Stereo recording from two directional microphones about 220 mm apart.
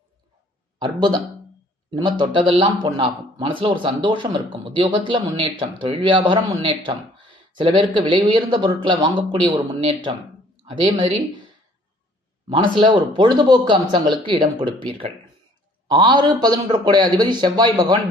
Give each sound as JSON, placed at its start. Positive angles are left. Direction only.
{"t": 0.8, "sound": "speech", "side_deg": -20}
{"t": 12.5, "sound": "speech", "side_deg": -20}